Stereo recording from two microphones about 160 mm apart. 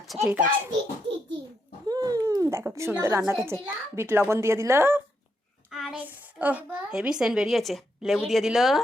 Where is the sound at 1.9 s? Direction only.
25° right (ahead or behind).